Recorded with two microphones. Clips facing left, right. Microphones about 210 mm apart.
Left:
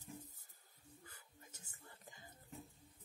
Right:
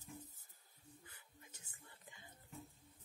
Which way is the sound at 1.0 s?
40° left (ahead or behind).